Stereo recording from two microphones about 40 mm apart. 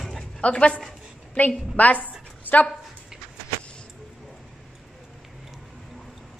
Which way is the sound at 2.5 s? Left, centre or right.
Left.